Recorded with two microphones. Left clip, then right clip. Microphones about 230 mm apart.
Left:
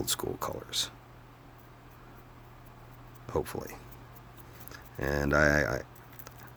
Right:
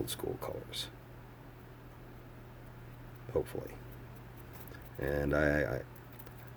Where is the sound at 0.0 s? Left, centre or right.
Left.